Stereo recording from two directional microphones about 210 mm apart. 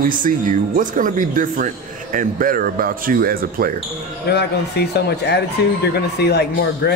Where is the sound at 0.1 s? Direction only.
40° right (ahead or behind).